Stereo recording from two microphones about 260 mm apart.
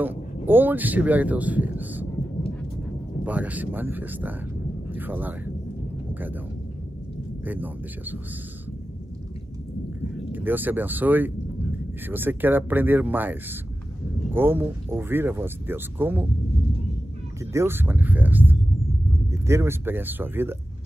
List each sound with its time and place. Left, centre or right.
0.5 s speech: centre
3.3 s speech: centre
7.4 s speech: centre
10.3 s speech: centre
17.5 s speech: centre